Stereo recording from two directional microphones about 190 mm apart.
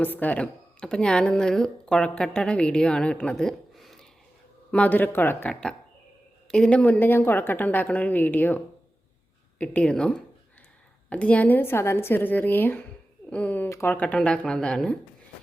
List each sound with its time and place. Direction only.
0.0 s a woman's voice: 10° left (ahead or behind)